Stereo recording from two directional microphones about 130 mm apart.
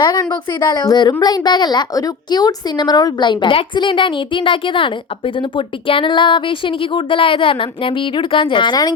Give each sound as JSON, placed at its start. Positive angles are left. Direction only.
{"t": 0.0, "sound": "a woman's voice", "side_deg": 35}